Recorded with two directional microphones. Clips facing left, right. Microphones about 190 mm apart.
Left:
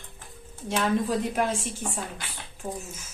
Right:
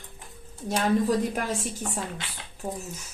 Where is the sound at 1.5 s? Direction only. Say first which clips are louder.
Even; 40° right (ahead or behind).